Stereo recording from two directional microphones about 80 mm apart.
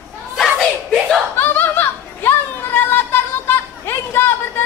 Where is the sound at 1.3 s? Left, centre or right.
Left.